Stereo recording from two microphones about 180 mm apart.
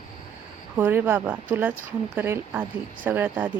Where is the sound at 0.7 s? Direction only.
10° right (ahead or behind).